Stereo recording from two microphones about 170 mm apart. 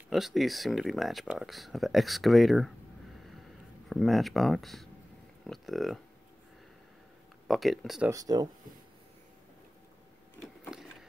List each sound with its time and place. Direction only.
0.1 s speech: centre (ahead or behind)
3.9 s speech: centre (ahead or behind)
7.4 s speech: centre (ahead or behind)
8.1 s speech: 20° right (ahead or behind)
10.7 s printer: centre (ahead or behind)